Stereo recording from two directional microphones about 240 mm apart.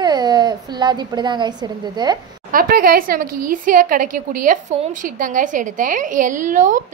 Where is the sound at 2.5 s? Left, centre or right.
Right.